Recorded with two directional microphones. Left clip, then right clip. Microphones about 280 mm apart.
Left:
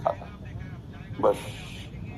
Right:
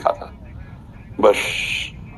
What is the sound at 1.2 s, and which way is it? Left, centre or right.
Speech, right.